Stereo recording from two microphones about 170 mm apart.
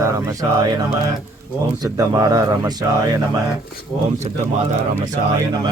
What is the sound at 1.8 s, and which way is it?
Speech, 20° right (ahead or behind).